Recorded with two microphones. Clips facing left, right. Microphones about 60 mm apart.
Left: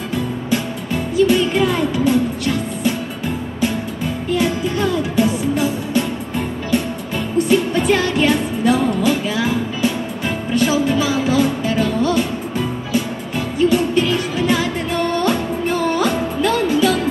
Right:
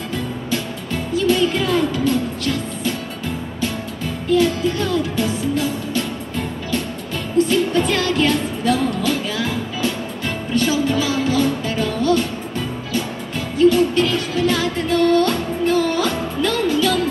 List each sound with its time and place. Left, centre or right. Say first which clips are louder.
1.1 s music: left 2 dB; centre
4.4 s music: left 1 dB; centre
13.7 s music: right 2 dB; centre